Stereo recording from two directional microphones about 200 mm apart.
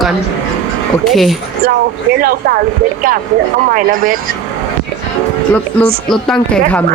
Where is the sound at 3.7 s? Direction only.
45° right (ahead or behind).